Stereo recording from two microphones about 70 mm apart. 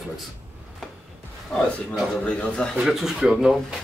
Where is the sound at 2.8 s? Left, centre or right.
Centre.